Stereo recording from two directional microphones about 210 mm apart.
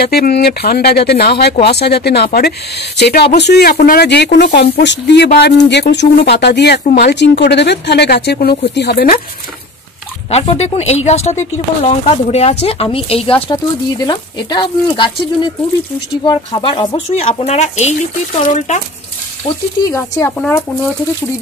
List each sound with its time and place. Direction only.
0.0 s speech: 50° left (ahead or behind)
6.8 s speech: 40° left (ahead or behind)
10.3 s speech: 30° left (ahead or behind)
19.9 s speech: 10° left (ahead or behind)